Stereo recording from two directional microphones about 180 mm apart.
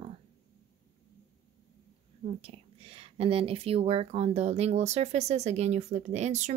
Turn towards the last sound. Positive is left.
turn(degrees=-40)  # may be behind; listen again after turning